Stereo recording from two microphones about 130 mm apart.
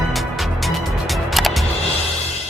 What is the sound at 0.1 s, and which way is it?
Music, centre (ahead or behind).